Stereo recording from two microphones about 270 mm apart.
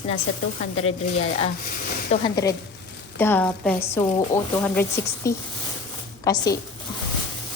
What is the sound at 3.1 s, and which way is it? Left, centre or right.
A woman's voice, centre.